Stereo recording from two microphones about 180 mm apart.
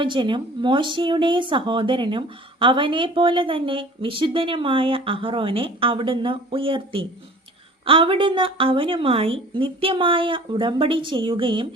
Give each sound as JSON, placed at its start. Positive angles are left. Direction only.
{"t": 0.0, "sound": "speech", "side_deg": -25}